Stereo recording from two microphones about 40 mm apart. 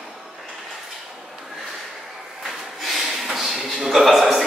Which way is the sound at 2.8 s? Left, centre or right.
Centre.